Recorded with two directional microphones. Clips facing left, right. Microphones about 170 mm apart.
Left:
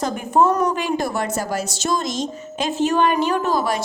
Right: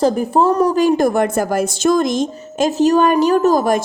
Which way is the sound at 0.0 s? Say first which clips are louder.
Right 4 dB; 30° right (ahead or behind).